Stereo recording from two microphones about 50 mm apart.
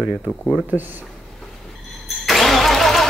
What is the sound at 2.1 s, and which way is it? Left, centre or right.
Vehicle, centre.